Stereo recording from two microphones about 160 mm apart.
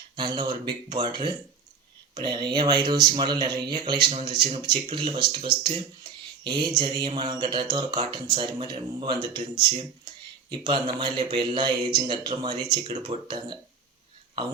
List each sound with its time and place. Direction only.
0.2 s speech: 25° right (ahead or behind)
10.5 s speech: 30° right (ahead or behind)